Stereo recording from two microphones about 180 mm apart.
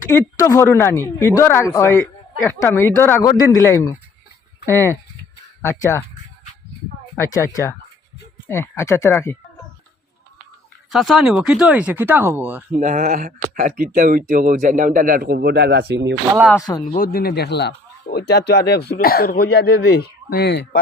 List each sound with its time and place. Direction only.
0.1 s speech: 15° left (ahead or behind)
7.2 s speech: 20° left (ahead or behind)
10.9 s speech: centre (ahead or behind)
12.7 s speech: 45° right (ahead or behind); by 16.1 s 70° right (ahead or behind)
16.9 s a man's voice: 55° left (ahead or behind)